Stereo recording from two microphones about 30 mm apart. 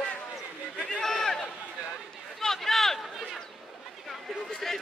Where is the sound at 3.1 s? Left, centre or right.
Centre.